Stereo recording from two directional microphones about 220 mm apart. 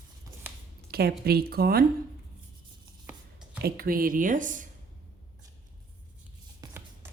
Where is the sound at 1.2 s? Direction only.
45° right (ahead or behind).